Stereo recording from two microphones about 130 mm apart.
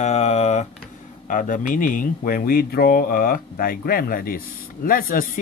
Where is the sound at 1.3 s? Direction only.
90° left.